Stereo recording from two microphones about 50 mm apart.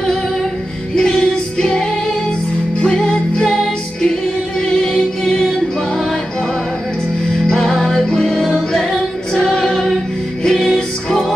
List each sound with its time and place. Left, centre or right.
0.0 s music: centre
7.4 s music: centre